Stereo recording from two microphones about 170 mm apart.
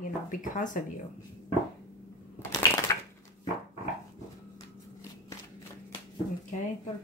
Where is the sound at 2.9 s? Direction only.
15° left (ahead or behind).